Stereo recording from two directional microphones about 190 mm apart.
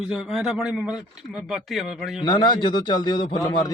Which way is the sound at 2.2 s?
25° left (ahead or behind).